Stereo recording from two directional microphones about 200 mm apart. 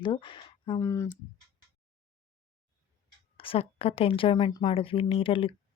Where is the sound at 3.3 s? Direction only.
25° left (ahead or behind).